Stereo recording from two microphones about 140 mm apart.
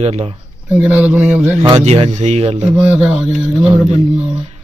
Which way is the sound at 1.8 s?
50° right (ahead or behind).